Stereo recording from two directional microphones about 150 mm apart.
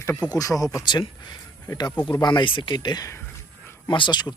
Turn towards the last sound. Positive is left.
turn(degrees=30)  # may be behind; listen again after turning